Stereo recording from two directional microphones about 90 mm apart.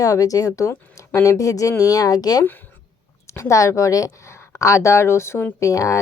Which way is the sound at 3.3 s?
35° left (ahead or behind).